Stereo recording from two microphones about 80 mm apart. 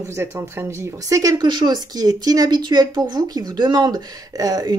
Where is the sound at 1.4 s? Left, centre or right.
Right.